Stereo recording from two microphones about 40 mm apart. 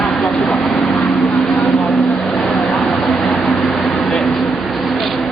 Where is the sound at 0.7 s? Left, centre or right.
Left.